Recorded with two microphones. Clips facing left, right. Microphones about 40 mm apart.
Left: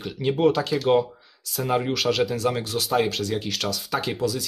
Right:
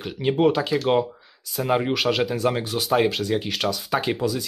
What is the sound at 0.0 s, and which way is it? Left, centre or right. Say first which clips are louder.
Speech: right 1 dB; centre.